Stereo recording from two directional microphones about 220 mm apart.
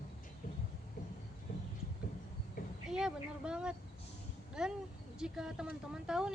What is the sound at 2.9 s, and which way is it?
Speech, 5° right (ahead or behind).